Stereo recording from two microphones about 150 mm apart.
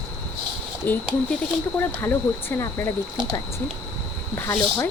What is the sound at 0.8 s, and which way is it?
Speech, 15° left (ahead or behind).